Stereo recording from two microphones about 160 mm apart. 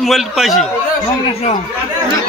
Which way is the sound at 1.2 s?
45° left (ahead or behind).